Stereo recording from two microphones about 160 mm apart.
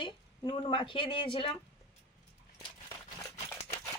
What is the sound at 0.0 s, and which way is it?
Speech, 30° left (ahead or behind).